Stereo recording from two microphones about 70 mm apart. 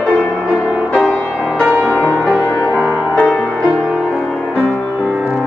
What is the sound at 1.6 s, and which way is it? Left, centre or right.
Music, right.